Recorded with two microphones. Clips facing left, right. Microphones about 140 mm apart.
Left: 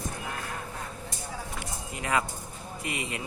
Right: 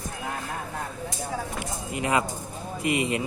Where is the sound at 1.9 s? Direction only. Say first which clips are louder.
Right 4 dB; 20° right (ahead or behind).